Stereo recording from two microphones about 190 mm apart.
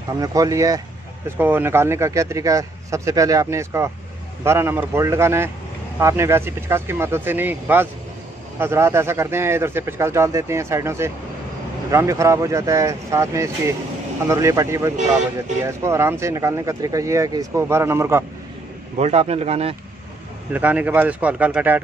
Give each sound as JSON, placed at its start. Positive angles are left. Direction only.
{"t": 0.2, "sound": "speech", "side_deg": -20}
{"t": 18.9, "sound": "a man's voice", "side_deg": -35}
{"t": 20.5, "sound": "speech", "side_deg": -10}